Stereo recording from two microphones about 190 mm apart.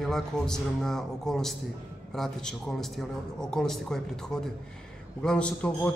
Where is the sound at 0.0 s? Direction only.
Centre (ahead or behind).